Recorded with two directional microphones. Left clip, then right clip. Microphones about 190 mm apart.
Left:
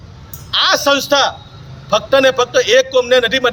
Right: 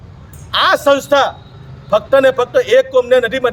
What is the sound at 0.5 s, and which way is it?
A man's voice, 5° right (ahead or behind).